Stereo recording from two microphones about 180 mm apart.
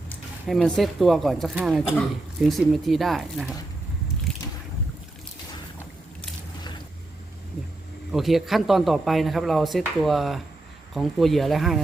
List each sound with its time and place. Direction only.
0.4 s speech: centre (ahead or behind)
8.1 s speech: centre (ahead or behind)